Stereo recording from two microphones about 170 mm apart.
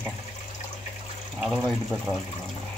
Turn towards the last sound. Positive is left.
turn(degrees=0)  # may be behind; listen again after turning